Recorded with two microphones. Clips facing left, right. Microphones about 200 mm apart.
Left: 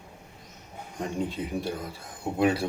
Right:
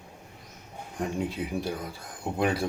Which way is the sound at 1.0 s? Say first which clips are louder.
Even; centre (ahead or behind).